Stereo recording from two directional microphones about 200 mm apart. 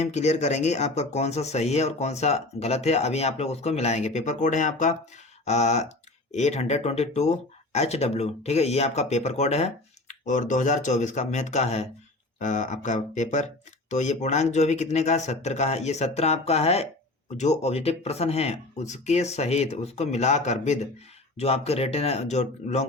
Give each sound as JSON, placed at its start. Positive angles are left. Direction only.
{"t": 0.0, "sound": "speech", "side_deg": 35}